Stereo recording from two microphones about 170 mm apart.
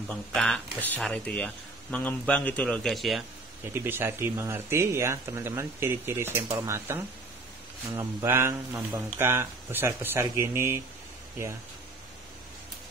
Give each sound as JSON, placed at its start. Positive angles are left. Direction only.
{"t": 0.1, "sound": "speech", "side_deg": 5}
{"t": 3.6, "sound": "speech", "side_deg": -15}